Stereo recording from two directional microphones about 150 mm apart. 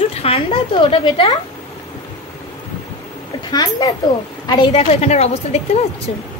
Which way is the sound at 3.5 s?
25° left (ahead or behind).